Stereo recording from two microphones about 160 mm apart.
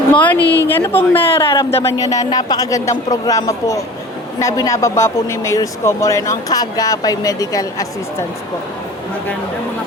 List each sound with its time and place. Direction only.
0.1 s a woman's voice: 10° left (ahead or behind)